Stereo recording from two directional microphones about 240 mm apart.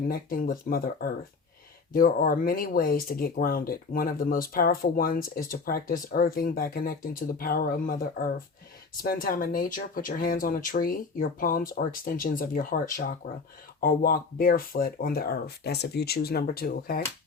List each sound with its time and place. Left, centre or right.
0.1 s speech: left